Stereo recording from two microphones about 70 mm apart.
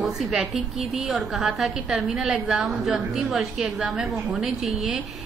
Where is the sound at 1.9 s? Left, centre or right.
Centre.